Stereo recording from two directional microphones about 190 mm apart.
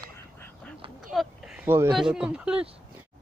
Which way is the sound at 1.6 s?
10° right (ahead or behind).